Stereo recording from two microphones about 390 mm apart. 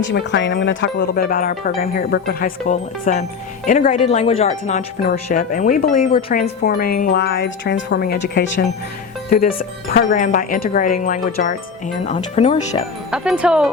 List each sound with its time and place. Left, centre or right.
0.0 s speech: left
13.1 s speech: centre